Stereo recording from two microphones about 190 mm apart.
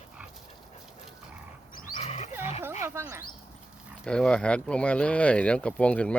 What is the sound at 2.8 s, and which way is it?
Speech, 15° right (ahead or behind).